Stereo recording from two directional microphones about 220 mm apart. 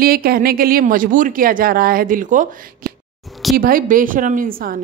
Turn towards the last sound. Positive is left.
turn(degrees=-40)  # may be behind; listen again after turning